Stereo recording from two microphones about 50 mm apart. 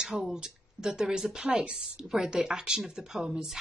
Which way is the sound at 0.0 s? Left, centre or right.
Centre.